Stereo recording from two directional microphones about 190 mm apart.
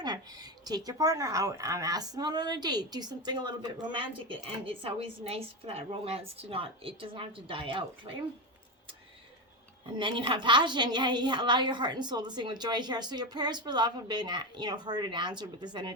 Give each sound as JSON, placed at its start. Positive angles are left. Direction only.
{"t": 0.0, "sound": "a woman's voice", "side_deg": -20}
{"t": 10.0, "sound": "a woman's voice", "side_deg": -25}